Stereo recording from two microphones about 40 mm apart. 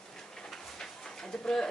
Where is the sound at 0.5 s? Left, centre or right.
Centre.